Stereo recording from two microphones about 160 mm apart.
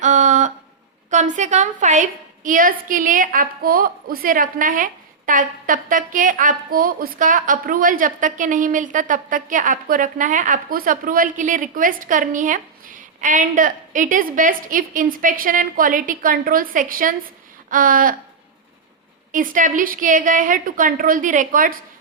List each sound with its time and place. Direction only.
0.0 s a sound: 50° right (ahead or behind)
1.1 s a woman's voice: 50° right (ahead or behind)
19.3 s a woman's voice: 55° right (ahead or behind)